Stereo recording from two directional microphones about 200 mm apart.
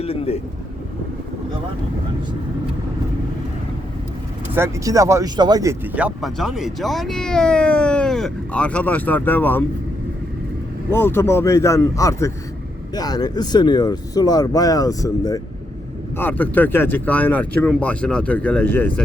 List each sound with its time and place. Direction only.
0.0 s speech: 30° left (ahead or behind)
4.5 s speech: 15° right (ahead or behind); by 9.6 s 10° left (ahead or behind)
10.9 s speech: 10° left (ahead or behind)